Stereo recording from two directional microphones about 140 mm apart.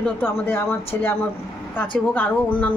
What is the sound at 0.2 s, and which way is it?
A woman's voice, 15° left (ahead or behind).